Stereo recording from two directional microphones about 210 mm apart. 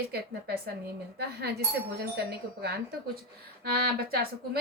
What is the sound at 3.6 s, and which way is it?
Speech, 45° right (ahead or behind).